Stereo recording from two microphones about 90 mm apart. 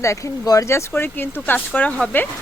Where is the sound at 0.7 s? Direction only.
25° left (ahead or behind).